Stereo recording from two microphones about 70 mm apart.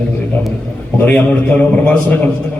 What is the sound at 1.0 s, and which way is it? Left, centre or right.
Speech, left.